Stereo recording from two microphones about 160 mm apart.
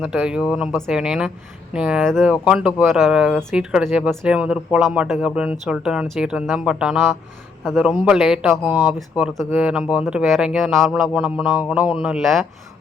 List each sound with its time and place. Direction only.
0.0 s speech: 5° right (ahead or behind)